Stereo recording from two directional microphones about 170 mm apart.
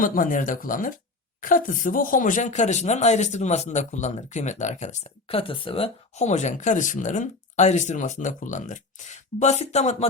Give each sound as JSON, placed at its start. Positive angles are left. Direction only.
{"t": 0.0, "sound": "speech", "side_deg": 55}